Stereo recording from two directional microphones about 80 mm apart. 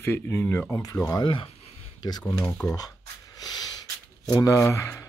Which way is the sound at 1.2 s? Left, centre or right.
Left.